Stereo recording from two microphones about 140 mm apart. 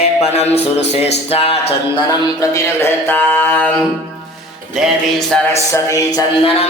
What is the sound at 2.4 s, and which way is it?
Music, 20° left (ahead or behind).